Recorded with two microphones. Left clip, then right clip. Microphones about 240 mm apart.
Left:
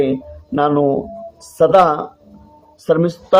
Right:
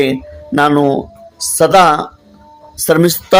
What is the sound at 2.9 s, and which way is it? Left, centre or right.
Speech, right.